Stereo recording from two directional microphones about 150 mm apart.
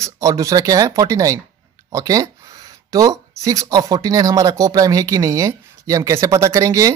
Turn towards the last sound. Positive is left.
turn(degrees=-20)  # may be behind; listen again after turning